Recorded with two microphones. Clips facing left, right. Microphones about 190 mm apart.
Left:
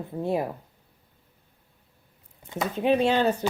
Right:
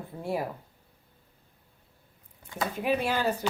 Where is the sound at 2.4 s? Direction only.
25° left (ahead or behind).